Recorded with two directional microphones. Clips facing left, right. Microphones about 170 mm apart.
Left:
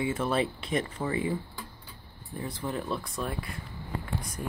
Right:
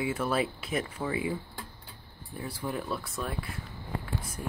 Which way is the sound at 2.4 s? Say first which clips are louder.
Left 1 dB; 10° right (ahead or behind).